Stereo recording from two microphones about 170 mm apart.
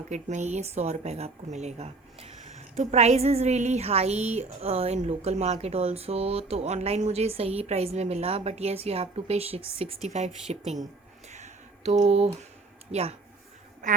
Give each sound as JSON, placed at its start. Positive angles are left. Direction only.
{"t": 0.1, "sound": "a woman's voice", "side_deg": -45}
{"t": 11.3, "sound": "a sound", "side_deg": -45}
{"t": 12.9, "sound": "a woman's voice", "side_deg": -35}